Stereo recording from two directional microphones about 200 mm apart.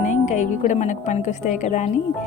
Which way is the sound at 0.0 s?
35° left (ahead or behind).